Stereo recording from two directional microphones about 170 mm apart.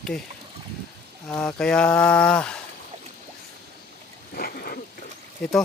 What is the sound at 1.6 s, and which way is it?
Speech, 5° left (ahead or behind).